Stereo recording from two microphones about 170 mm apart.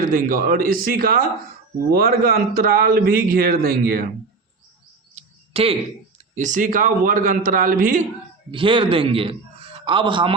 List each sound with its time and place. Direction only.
0.1 s a man's voice: 55° right (ahead or behind)
5.1 s a sound: 35° right (ahead or behind)
6.3 s a man's voice: 45° right (ahead or behind)
8.4 s a man's voice: 30° right (ahead or behind)